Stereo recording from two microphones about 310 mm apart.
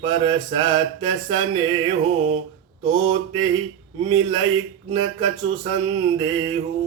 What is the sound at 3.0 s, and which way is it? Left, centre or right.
Mantra, centre.